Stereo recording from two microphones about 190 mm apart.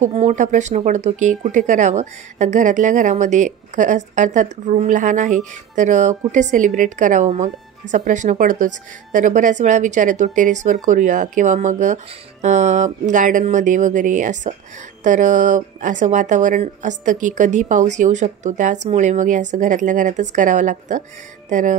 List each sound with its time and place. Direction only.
0.0 s speech: 35° right (ahead or behind)